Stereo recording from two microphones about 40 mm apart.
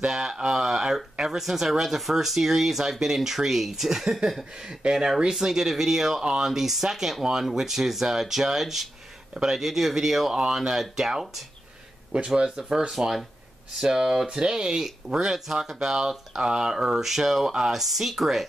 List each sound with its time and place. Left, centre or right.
0.1 s speech: centre
6.2 s speech: right
6.5 s speech: centre
12.1 s speech: right
12.9 s speech: centre
15.2 s speech: centre